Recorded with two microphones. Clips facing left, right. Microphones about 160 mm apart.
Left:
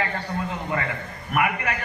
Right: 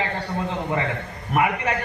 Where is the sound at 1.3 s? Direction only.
30° right (ahead or behind).